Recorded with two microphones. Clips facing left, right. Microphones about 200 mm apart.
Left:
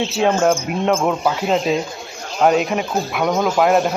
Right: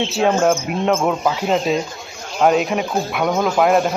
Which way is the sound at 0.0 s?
Centre (ahead or behind).